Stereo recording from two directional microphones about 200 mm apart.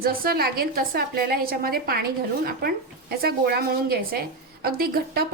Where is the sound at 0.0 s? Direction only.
45° right (ahead or behind).